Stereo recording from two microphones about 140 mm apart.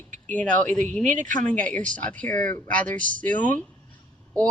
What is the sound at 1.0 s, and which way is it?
Speech, 65° right (ahead or behind).